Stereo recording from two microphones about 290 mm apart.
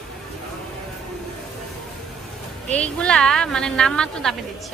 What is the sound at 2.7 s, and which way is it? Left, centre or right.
A woman's voice, centre.